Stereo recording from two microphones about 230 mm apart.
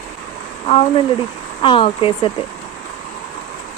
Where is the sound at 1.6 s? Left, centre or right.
Left.